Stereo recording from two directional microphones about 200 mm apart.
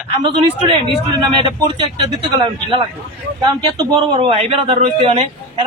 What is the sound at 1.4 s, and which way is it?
A man's voice, 25° right (ahead or behind).